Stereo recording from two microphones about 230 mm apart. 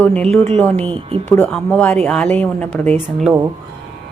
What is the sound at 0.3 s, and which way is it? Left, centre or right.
Speech, right.